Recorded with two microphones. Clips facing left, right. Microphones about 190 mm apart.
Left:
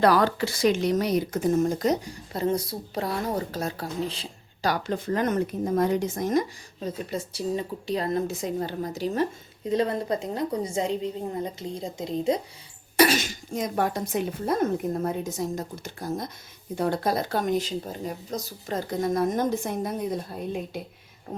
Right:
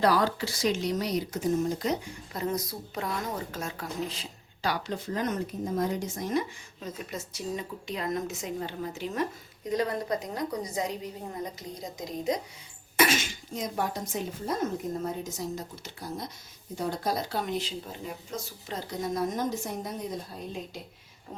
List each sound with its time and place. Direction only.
0.0 s speech: 60° left (ahead or behind); by 4.7 s 30° left (ahead or behind)
4.7 s speech: 55° left (ahead or behind)
6.2 s a woman's voice: 40° left (ahead or behind)
16.7 s speech: 60° left (ahead or behind)